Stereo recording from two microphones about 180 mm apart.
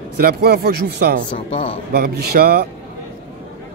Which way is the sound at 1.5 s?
30° left (ahead or behind).